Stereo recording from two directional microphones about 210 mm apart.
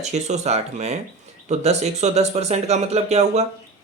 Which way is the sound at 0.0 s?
30° right (ahead or behind).